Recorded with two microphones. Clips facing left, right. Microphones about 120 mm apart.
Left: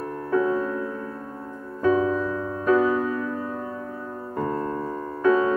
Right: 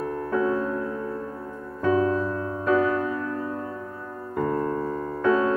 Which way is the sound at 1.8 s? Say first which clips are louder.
Left 1 dB; centre (ahead or behind).